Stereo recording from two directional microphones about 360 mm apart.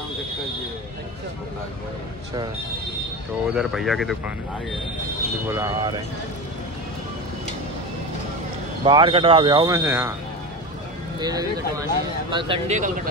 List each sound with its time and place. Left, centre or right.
3.4 s speech: centre
5.5 s speech: centre
8.8 s speech: centre
11.1 s speech: centre